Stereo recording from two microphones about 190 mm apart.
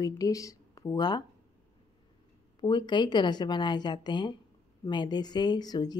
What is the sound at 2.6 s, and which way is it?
A woman's voice, 25° left (ahead or behind).